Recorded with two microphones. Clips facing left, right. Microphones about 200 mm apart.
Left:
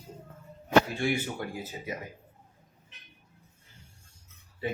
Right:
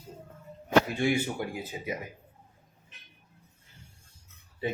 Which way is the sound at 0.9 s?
15° right (ahead or behind).